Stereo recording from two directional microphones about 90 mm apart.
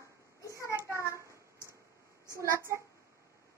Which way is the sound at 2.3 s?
30° right (ahead or behind).